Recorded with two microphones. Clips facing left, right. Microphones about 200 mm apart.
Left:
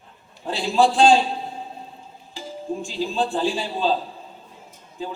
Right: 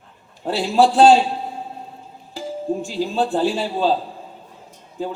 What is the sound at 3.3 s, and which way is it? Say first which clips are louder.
Speech: right 4 dB; 65° right (ahead or behind).